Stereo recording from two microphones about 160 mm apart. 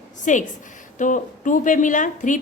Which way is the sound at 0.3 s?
50° left (ahead or behind).